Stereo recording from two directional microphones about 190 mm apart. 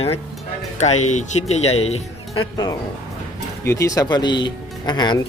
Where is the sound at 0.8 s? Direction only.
35° left (ahead or behind).